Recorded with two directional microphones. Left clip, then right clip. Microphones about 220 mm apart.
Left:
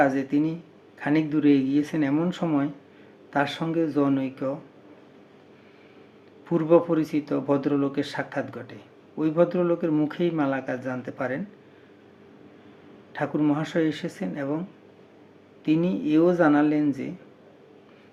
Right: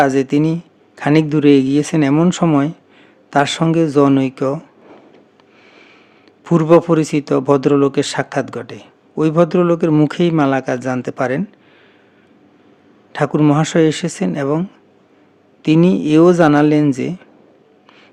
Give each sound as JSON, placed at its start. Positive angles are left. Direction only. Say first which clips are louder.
{"t": 0.0, "sound": "a man's voice", "louder": "right 9 dB", "side_deg": -50}
{"t": 6.4, "sound": "a man's voice", "louder": "right 9 dB", "side_deg": -50}
{"t": 13.1, "sound": "a man's voice", "louder": "right 11 dB", "side_deg": -50}
{"t": 15.6, "sound": "a man's voice", "louder": "right 11 dB", "side_deg": -50}